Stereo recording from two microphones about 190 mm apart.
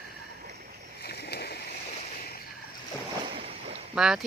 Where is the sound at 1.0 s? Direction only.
55° left (ahead or behind).